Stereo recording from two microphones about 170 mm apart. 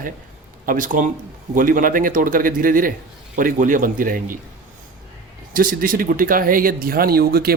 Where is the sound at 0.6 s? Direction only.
55° right (ahead or behind).